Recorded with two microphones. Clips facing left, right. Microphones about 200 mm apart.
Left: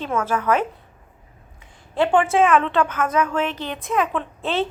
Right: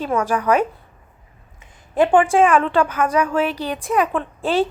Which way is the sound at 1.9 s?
15° right (ahead or behind).